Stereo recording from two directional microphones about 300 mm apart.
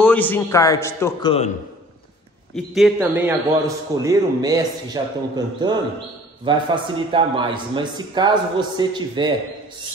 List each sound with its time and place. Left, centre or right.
0.0 s a man's voice: centre
2.5 s a man's voice: centre